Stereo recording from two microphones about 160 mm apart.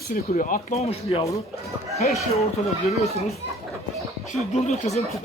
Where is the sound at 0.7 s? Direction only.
40° left (ahead or behind).